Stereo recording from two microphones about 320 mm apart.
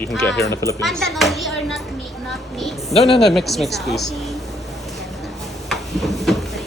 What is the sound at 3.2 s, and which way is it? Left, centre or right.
Speech, centre.